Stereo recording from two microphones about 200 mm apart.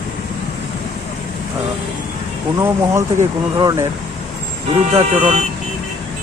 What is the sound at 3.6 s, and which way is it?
Speech, 20° right (ahead or behind).